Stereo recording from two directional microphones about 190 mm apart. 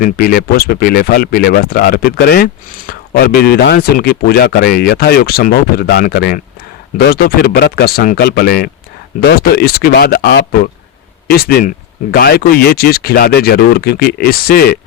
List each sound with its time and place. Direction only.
0.0 s speech: 50° left (ahead or behind)